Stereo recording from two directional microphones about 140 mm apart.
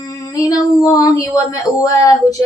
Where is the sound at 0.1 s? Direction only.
25° left (ahead or behind).